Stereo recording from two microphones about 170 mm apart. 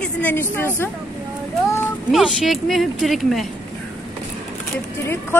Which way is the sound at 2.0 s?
Centre (ahead or behind).